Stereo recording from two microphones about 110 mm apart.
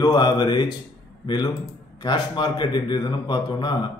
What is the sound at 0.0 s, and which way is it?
A man's voice, 40° left (ahead or behind).